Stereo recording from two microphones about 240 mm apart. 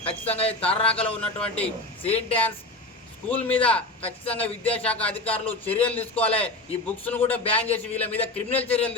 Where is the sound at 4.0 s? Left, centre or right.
Left.